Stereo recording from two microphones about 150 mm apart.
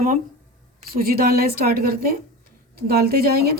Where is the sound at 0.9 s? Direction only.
85° right.